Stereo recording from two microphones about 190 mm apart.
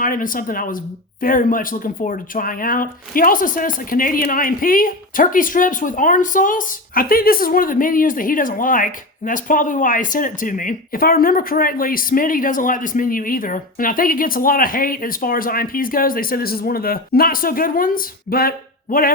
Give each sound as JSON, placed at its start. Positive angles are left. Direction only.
{"t": 0.0, "sound": "speech", "side_deg": 45}